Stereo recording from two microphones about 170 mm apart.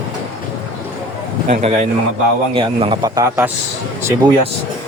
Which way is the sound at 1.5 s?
40° right (ahead or behind).